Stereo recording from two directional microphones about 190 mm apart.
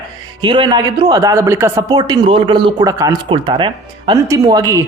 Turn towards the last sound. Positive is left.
turn(degrees=-20)  # may be behind; listen again after turning